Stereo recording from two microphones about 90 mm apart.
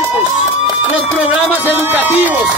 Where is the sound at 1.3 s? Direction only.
20° right (ahead or behind).